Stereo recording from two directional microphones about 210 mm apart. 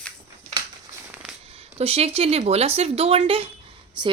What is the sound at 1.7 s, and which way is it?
A woman's voice, 30° right (ahead or behind).